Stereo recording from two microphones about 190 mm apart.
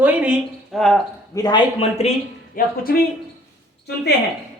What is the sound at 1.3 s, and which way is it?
Speech, 25° left (ahead or behind).